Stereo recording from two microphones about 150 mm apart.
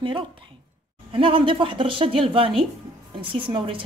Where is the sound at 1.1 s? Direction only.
35° right (ahead or behind).